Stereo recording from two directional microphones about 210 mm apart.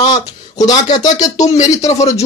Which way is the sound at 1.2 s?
35° left (ahead or behind).